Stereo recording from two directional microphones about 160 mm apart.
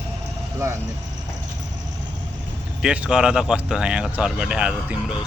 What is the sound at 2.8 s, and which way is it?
Speech, 5° right (ahead or behind).